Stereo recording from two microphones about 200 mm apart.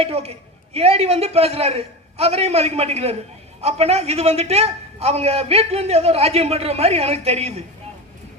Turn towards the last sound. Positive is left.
turn(degrees=-30)  # may be behind; listen again after turning